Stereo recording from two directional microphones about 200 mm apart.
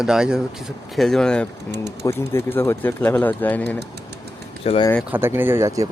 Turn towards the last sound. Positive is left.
turn(degrees=-15)  # may be behind; listen again after turning